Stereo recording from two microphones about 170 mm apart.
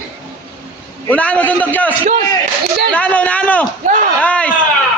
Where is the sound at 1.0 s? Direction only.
10° left (ahead or behind).